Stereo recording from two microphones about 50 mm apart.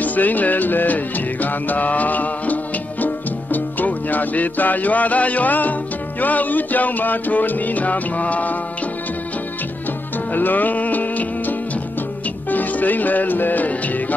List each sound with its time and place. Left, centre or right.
0.0 s music: left
10.3 s music: left